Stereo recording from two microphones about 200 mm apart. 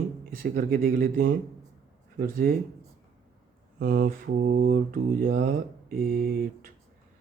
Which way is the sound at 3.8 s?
45° right (ahead or behind).